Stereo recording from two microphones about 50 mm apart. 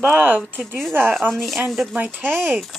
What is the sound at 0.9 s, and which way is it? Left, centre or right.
Speech, right.